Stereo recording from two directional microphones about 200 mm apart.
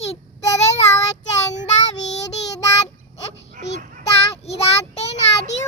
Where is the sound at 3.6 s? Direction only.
40° right (ahead or behind).